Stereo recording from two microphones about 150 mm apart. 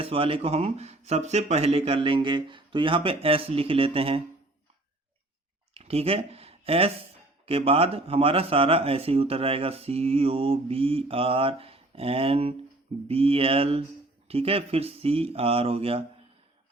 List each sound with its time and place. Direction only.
0.0 s speech: 40° right (ahead or behind)
5.7 s a sound: 45° right (ahead or behind)
7.4 s speech: 40° right (ahead or behind)